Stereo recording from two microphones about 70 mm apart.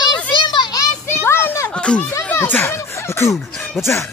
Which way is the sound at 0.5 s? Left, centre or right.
Left.